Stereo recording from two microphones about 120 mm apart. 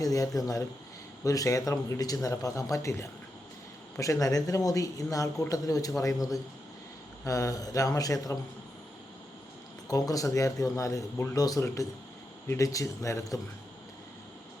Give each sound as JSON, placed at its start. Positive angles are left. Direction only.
{"t": 0.0, "sound": "speech", "side_deg": 30}
{"t": 9.9, "sound": "speech", "side_deg": 30}